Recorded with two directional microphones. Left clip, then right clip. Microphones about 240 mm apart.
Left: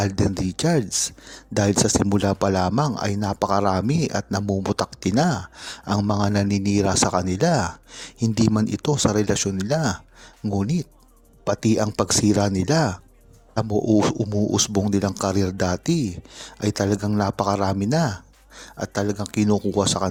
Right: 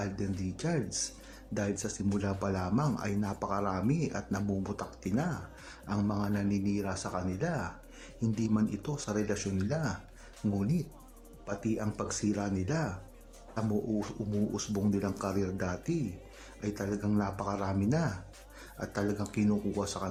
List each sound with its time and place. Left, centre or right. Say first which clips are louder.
0.0 s a man's voice: left 13 dB; left